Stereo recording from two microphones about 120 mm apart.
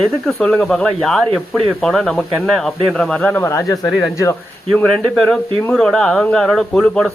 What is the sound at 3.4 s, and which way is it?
Speech, 25° left (ahead or behind).